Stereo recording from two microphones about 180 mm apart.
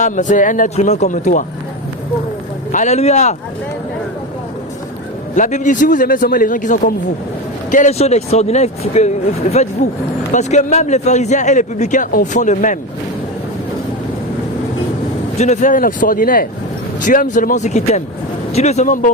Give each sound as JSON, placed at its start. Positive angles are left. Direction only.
{"t": 0.0, "sound": "a man's voice", "side_deg": 45}
{"t": 2.7, "sound": "a man's voice", "side_deg": 40}
{"t": 5.3, "sound": "a man's voice", "side_deg": 45}
{"t": 15.4, "sound": "a man's voice", "side_deg": 40}